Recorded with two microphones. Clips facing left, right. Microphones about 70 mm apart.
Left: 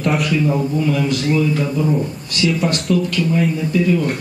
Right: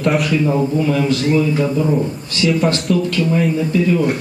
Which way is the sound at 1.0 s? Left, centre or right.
Right.